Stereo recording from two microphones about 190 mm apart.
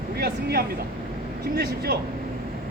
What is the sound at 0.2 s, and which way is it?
Speech, 55° right (ahead or behind).